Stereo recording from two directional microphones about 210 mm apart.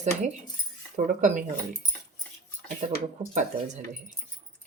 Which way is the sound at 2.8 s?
35° right (ahead or behind).